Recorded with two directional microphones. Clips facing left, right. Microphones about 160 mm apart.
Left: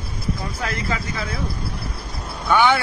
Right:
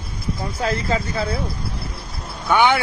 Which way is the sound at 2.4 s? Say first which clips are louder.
Right 1 dB; 15° right (ahead or behind).